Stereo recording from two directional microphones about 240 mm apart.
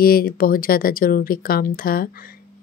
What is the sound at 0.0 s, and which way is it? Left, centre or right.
Speech, left.